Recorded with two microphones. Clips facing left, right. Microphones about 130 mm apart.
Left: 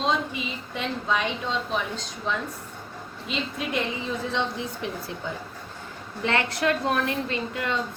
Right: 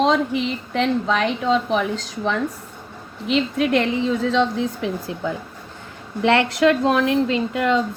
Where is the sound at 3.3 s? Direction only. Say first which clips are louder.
Right 11 dB; 90° right.